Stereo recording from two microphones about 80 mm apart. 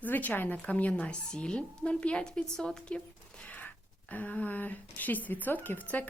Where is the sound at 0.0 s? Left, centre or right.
Left.